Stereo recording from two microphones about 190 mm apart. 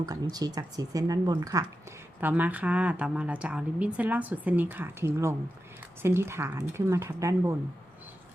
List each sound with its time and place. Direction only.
0.0 s speech: 20° right (ahead or behind)
2.2 s speech: 10° right (ahead or behind)